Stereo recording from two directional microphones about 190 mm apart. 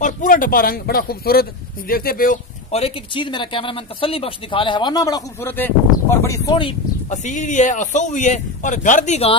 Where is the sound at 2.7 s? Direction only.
30° left (ahead or behind).